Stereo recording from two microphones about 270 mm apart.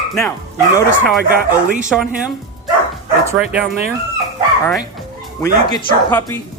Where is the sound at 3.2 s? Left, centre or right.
Centre.